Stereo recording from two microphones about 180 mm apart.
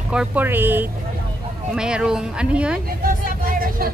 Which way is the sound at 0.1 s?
5° right (ahead or behind).